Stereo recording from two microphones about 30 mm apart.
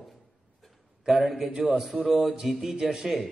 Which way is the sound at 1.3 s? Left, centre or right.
Right.